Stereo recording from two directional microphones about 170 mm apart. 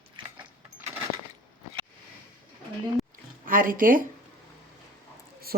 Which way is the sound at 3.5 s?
55° right (ahead or behind).